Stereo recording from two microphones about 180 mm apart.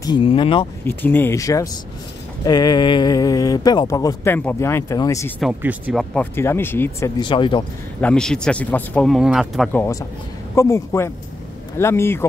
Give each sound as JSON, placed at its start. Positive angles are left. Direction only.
{"t": 0.0, "sound": "speech", "side_deg": 25}
{"t": 0.8, "sound": "speech", "side_deg": 10}
{"t": 5.4, "sound": "speech", "side_deg": -5}
{"t": 6.1, "sound": "speech", "side_deg": 15}
{"t": 7.2, "sound": "speech", "side_deg": 25}
{"t": 8.0, "sound": "speech", "side_deg": 5}